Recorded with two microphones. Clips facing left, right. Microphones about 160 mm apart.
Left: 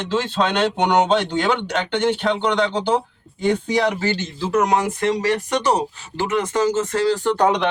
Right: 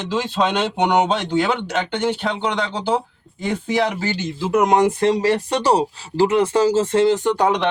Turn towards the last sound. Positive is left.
turn(degrees=-5)  # may be behind; listen again after turning